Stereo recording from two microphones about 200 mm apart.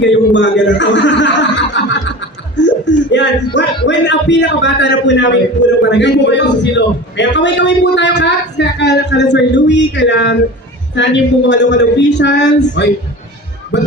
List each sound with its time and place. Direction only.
0.0 s a man's voice: 65° left (ahead or behind)